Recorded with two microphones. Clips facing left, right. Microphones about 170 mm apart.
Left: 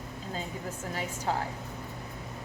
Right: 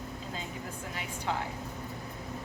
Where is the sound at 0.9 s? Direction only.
40° left (ahead or behind).